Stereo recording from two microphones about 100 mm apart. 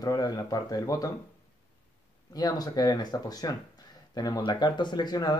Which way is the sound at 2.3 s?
40° left (ahead or behind).